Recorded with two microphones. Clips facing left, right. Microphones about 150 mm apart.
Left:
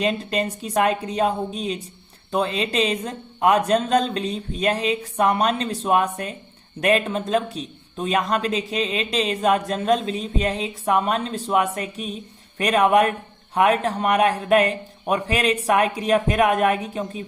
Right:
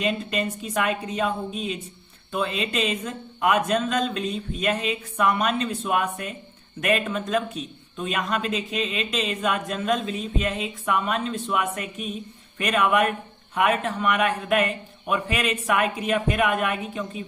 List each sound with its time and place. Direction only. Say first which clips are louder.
0.0 s a man's voice: left 3 dB; 35° left (ahead or behind)